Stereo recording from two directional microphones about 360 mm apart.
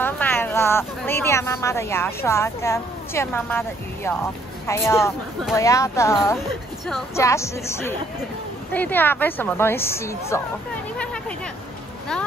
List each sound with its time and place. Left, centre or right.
0.0 s speech: centre